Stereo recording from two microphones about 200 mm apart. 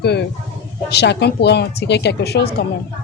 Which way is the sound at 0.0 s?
55° left (ahead or behind).